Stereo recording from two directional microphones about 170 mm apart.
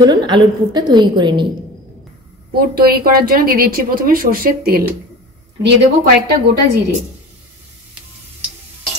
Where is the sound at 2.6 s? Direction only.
65° right (ahead or behind).